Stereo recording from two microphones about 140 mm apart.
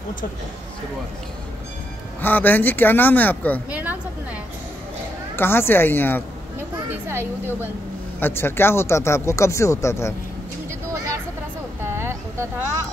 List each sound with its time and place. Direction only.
2.2 s speech: 15° left (ahead or behind)
3.7 s a sound: 10° right (ahead or behind)
5.3 s speech: 15° left (ahead or behind)
6.9 s speech: 15° right (ahead or behind)
8.2 s speech: 15° left (ahead or behind)
11.8 s a sound: 20° right (ahead or behind)